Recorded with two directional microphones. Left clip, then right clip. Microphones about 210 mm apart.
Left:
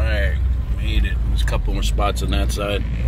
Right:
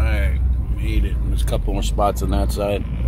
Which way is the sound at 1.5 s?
5° right (ahead or behind).